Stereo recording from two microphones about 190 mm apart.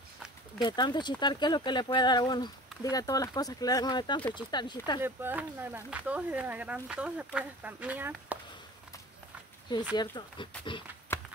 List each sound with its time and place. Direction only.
0.6 s speech: 25° left (ahead or behind)
5.0 s speech: 10° right (ahead or behind)
9.9 s speech: 20° left (ahead or behind)